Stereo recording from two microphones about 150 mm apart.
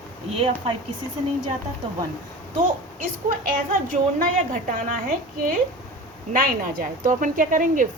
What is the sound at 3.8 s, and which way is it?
A woman's voice, 65° right (ahead or behind).